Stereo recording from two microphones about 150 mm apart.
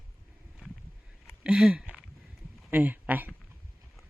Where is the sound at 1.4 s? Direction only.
5° right (ahead or behind).